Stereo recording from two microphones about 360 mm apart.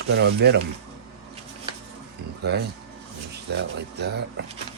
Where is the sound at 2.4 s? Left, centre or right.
Right.